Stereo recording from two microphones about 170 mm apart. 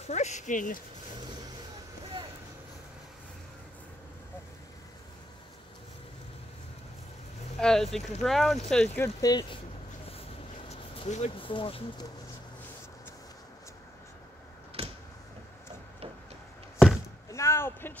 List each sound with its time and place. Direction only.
0.1 s speech: 45° left (ahead or behind)
7.5 s speech: centre (ahead or behind); by 9.6 s 25° left (ahead or behind)
10.7 s speech: 40° left (ahead or behind)
14.8 s a sound: 35° right (ahead or behind)
16.7 s chop: centre (ahead or behind)
17.3 s a sound: 15° left (ahead or behind)